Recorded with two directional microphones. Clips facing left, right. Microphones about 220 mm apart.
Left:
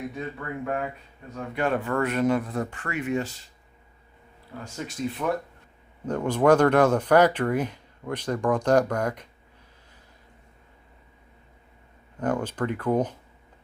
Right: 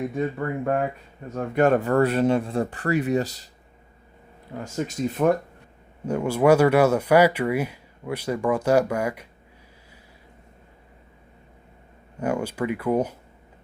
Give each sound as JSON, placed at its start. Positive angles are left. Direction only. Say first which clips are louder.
{"t": 0.2, "sound": "speech", "louder": "right 7 dB", "side_deg": -40}
{"t": 4.5, "sound": "speech", "louder": "right 7 dB", "side_deg": -50}
{"t": 6.1, "sound": "speech", "louder": "right 2 dB", "side_deg": -10}
{"t": 12.2, "sound": "speech", "louder": "right 1 dB", "side_deg": -10}